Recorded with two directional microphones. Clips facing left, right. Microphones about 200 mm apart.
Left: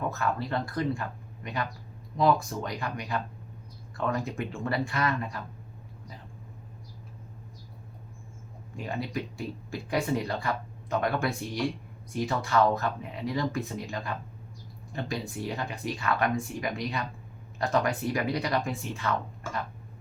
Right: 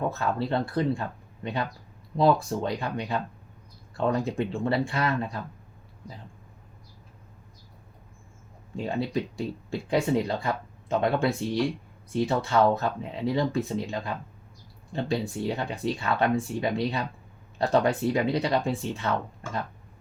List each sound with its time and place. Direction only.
0.1 s speech: 30° right (ahead or behind)
8.7 s speech: 30° right (ahead or behind)